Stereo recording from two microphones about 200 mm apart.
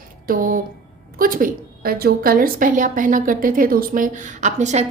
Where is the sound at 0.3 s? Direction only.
45° right (ahead or behind).